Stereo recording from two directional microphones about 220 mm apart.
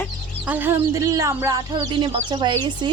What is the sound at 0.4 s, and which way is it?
Chicken, 10° right (ahead or behind).